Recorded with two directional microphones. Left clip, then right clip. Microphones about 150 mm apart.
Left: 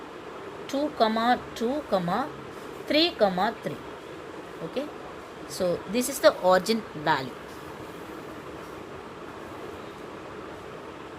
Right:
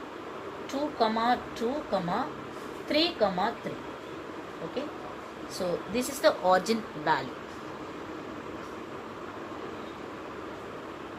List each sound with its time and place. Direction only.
0.7 s speech: 80° left
5.5 s speech: 85° left; by 7.3 s 55° left (ahead or behind)